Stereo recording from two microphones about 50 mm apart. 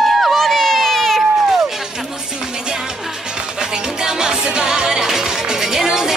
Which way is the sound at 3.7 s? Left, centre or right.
Centre.